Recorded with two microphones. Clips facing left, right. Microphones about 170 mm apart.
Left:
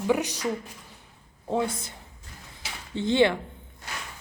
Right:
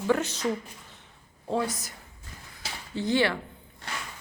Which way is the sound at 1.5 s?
25° left (ahead or behind).